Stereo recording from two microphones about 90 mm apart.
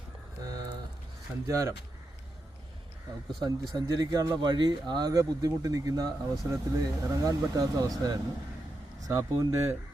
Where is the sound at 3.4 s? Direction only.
45° right (ahead or behind).